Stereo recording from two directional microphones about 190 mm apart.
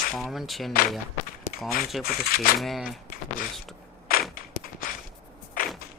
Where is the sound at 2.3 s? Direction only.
50° left (ahead or behind).